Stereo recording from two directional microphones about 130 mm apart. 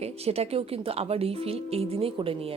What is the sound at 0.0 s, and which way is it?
A woman's voice, 50° right (ahead or behind).